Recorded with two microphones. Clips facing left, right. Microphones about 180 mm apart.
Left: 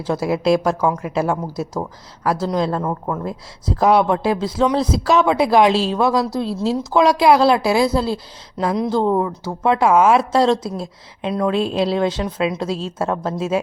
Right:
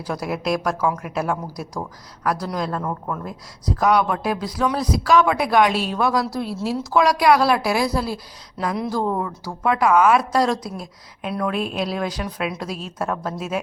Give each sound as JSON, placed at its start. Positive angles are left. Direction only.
{"t": 0.0, "sound": "speech", "side_deg": 25}